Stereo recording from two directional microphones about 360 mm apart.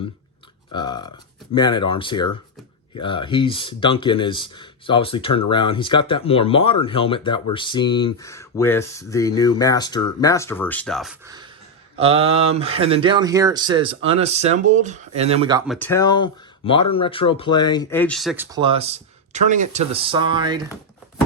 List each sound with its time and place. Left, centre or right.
0.7 s speech: centre
15.6 s speech: centre